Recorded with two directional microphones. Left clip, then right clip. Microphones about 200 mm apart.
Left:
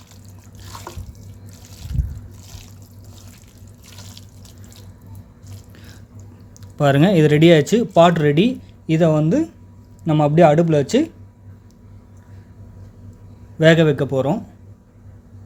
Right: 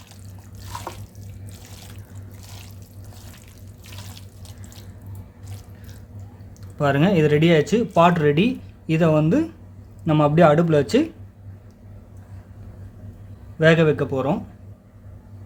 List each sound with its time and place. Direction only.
6.7 s speech: 25° left (ahead or behind)
13.6 s speech: 20° left (ahead or behind)